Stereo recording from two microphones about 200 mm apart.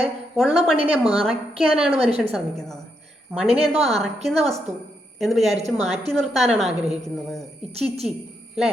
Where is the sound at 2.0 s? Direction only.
30° right (ahead or behind).